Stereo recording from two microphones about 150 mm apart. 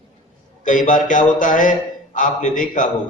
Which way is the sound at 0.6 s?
60° left (ahead or behind).